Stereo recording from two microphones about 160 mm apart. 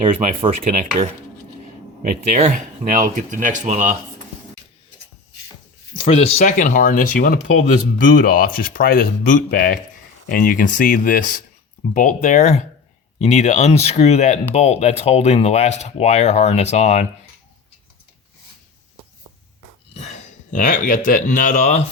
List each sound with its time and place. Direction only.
2.0 s speech: 55° right (ahead or behind)
6.0 s speech: 40° left (ahead or behind)
19.9 s speech: 45° left (ahead or behind)